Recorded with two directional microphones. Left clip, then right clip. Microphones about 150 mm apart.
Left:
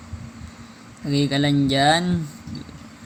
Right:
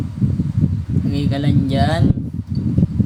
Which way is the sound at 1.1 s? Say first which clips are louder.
Left 2 dB; 10° left (ahead or behind).